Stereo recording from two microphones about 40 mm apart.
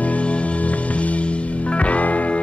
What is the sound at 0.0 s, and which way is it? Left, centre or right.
Music, left.